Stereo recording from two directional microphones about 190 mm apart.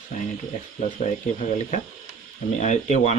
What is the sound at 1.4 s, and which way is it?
Speech, 35° left (ahead or behind).